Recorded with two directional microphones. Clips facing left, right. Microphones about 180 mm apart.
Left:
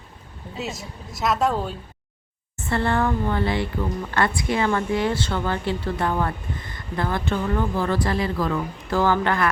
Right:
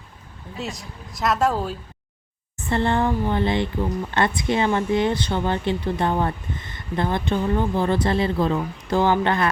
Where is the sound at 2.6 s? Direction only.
20° right (ahead or behind).